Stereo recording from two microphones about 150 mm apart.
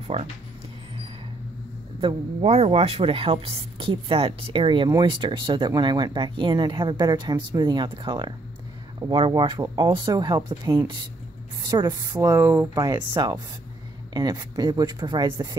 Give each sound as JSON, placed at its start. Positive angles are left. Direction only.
{"t": 0.1, "sound": "speech", "side_deg": -45}
{"t": 2.0, "sound": "speech", "side_deg": -40}